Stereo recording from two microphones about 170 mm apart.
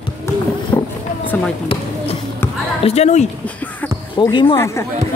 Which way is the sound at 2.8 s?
40° left (ahead or behind).